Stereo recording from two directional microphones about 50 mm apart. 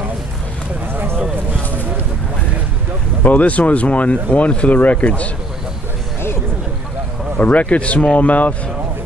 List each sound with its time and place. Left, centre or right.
3.3 s speech: left
7.3 s speech: left